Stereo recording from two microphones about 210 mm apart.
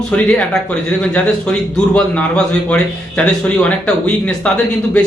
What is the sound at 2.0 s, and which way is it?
A man's voice, 5° left (ahead or behind).